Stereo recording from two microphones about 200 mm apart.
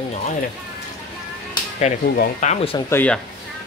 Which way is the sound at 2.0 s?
45° left (ahead or behind).